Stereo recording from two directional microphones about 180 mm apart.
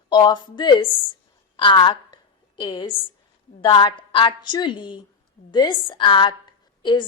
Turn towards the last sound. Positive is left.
turn(degrees=25)  # may be behind; listen again after turning